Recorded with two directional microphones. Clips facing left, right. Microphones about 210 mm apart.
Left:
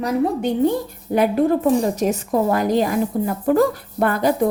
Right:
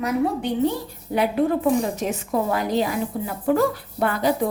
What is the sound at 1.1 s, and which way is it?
A woman's voice, 45° left (ahead or behind).